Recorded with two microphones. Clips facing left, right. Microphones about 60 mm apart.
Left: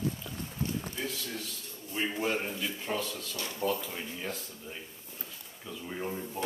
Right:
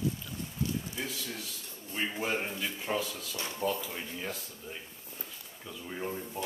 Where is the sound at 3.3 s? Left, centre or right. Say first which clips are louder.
Right 3 dB; right.